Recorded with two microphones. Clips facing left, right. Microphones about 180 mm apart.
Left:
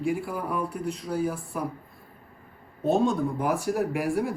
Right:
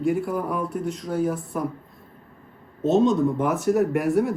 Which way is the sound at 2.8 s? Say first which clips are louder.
Right 4 dB; 20° right (ahead or behind).